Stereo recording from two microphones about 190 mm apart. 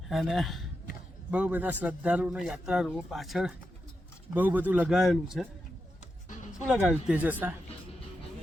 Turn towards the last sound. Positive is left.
turn(degrees=-10)  # may be behind; listen again after turning